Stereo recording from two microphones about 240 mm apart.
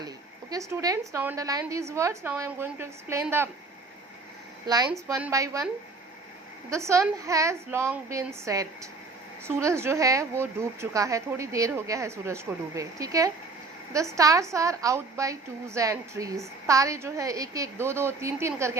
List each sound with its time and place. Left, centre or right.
0.5 s a woman's voice: centre
4.6 s a woman's voice: centre
6.7 s a woman's voice: centre